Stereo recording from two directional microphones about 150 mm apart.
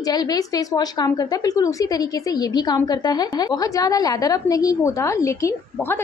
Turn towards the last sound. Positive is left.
turn(degrees=15)  # may be behind; listen again after turning